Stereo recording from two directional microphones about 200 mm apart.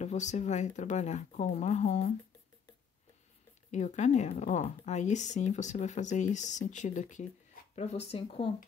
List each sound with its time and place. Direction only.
0.0 s speech: 35° left (ahead or behind)
3.7 s speech: 35° left (ahead or behind)